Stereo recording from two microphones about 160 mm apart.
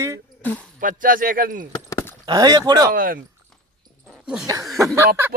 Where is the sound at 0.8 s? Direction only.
55° right (ahead or behind).